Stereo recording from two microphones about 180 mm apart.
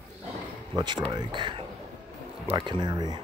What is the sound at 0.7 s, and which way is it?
Speech, 25° right (ahead or behind).